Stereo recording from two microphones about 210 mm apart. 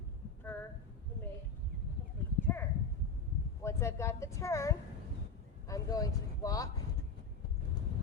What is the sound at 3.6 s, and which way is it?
A woman's voice, 10° left (ahead or behind).